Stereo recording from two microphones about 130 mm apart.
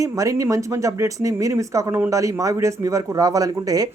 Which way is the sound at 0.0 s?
25° right (ahead or behind).